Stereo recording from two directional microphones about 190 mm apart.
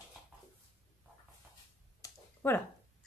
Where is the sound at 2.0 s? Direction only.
15° left (ahead or behind).